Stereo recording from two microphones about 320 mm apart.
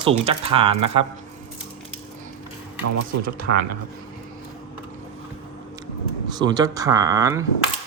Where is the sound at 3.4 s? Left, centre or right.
Right.